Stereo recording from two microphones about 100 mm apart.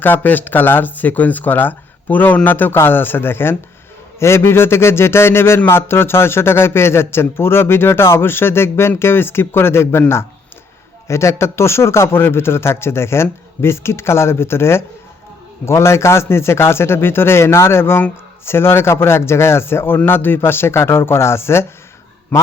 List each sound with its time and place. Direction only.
0.0 s a man's voice: 20° left (ahead or behind)
11.1 s a man's voice: 30° left (ahead or behind)